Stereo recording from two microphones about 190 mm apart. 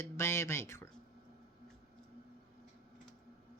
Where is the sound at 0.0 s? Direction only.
15° left (ahead or behind).